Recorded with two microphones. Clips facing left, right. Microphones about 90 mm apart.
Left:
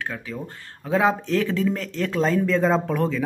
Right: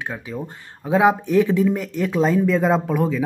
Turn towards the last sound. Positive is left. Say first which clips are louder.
# right 2 dB
turn(degrees=-5)  # may be behind; listen again after turning